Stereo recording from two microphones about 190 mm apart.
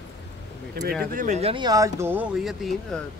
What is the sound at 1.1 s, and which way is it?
Speech, 40° right (ahead or behind).